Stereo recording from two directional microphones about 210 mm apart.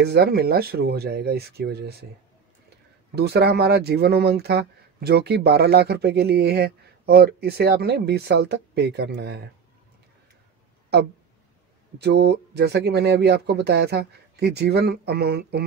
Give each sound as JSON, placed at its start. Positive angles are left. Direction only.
{"t": 0.0, "sound": "speech", "side_deg": -50}
{"t": 3.2, "sound": "speech", "side_deg": -50}
{"t": 12.0, "sound": "speech", "side_deg": -50}